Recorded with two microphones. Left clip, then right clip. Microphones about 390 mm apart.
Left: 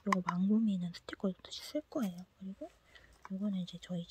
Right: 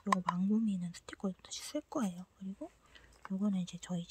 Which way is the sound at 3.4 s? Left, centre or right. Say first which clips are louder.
Right 2 dB; centre.